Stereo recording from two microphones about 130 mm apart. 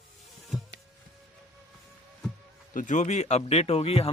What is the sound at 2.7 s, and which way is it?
Speech, 80° left.